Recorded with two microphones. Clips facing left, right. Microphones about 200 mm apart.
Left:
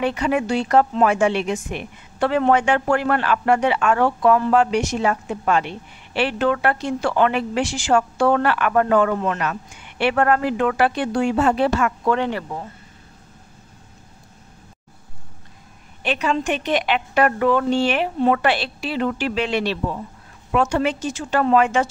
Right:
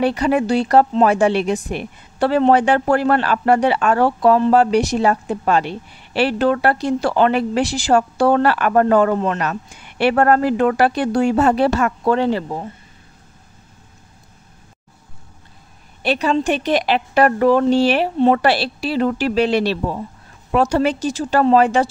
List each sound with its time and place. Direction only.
0.0 s a woman's voice: 35° right (ahead or behind)
16.0 s a woman's voice: 35° right (ahead or behind)